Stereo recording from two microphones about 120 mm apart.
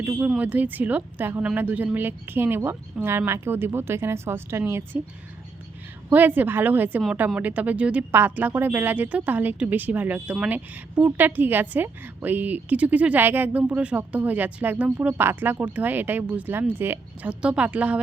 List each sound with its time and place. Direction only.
0.0 s a woman's voice: 15° right (ahead or behind)
6.1 s a woman's voice: 15° right (ahead or behind)